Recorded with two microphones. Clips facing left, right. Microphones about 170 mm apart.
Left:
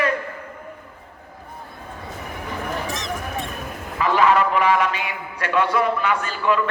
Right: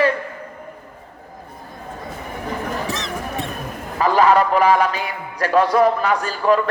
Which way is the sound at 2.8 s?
65° right (ahead or behind).